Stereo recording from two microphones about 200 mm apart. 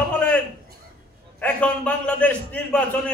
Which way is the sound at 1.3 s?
5° left (ahead or behind).